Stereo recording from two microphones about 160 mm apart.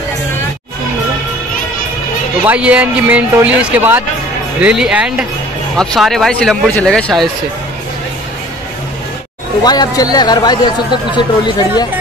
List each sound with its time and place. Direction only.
2.4 s a man's voice: 10° right (ahead or behind)
9.6 s speech: 25° left (ahead or behind)